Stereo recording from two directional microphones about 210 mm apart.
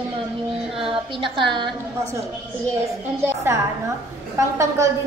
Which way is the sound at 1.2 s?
25° right (ahead or behind).